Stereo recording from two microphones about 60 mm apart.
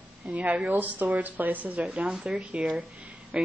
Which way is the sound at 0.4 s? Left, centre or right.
Right.